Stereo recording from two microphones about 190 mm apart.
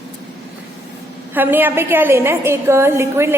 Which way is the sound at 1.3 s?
10° right (ahead or behind).